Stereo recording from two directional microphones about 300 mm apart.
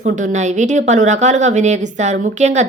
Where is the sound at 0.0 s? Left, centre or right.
Right.